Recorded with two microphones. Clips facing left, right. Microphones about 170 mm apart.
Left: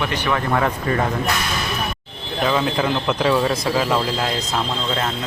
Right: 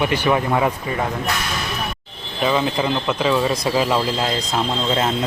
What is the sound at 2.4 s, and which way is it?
Speech, 5° right (ahead or behind).